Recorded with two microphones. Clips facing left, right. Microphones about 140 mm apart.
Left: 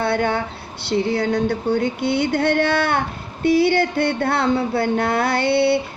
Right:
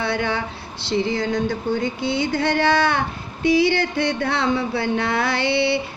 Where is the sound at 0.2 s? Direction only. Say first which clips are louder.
Left 3 dB; 55° left (ahead or behind).